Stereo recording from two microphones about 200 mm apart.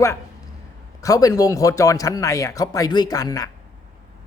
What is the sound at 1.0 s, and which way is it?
Speech, 15° left (ahead or behind).